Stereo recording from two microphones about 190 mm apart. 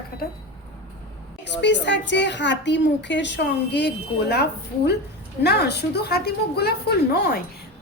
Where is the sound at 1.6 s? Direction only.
65° left (ahead or behind).